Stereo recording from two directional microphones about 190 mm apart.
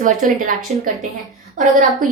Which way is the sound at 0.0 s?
45° right (ahead or behind).